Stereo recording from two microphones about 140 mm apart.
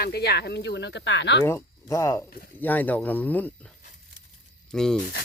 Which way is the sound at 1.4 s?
20° left (ahead or behind).